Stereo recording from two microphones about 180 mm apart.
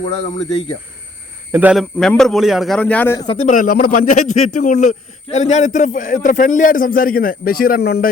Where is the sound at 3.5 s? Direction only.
50° left (ahead or behind).